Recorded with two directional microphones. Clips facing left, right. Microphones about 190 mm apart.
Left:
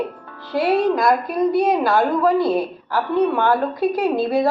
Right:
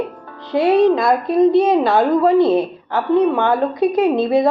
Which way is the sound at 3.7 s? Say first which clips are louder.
Right 4 dB; centre (ahead or behind).